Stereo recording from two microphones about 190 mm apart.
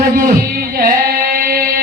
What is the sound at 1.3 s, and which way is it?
Music, 50° right (ahead or behind).